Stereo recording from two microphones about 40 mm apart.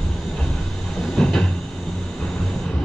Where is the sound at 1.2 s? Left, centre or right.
Centre.